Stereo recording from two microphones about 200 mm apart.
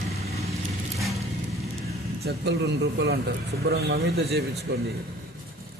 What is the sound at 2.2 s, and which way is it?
A man's voice, 55° right (ahead or behind).